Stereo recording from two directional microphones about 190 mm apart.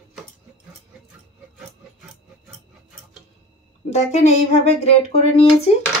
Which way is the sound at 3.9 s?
35° left (ahead or behind).